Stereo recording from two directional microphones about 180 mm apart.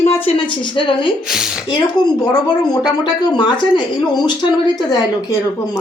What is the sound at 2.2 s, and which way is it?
Speech, 20° left (ahead or behind).